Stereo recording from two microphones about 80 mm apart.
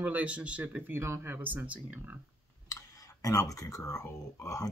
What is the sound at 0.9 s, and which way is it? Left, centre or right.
Speech, right.